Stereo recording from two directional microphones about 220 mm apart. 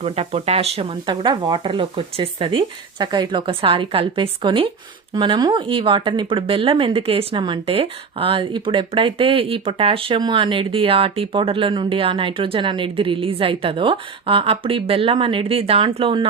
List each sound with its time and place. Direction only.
0.0 s speech: 25° right (ahead or behind)